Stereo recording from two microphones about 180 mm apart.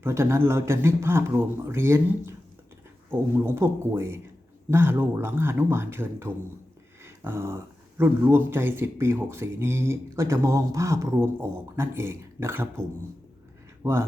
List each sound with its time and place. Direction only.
0.0 s speech: 15° right (ahead or behind)
13.8 s speech: 15° right (ahead or behind)